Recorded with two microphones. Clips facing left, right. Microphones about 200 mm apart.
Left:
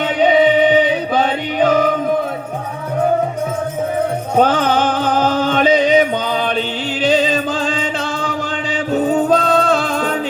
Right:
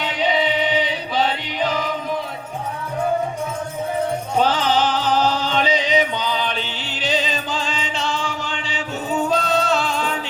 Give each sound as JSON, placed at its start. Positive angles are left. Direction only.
{"t": 0.0, "sound": "music", "side_deg": 55}
{"t": 4.4, "sound": "music", "side_deg": 55}
{"t": 8.9, "sound": "music", "side_deg": 55}